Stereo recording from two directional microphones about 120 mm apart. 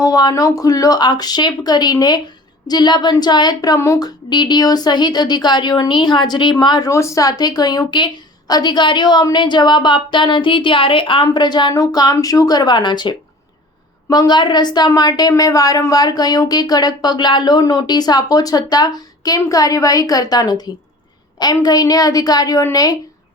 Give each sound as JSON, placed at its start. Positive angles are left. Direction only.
{"t": 0.0, "sound": "speech", "side_deg": 35}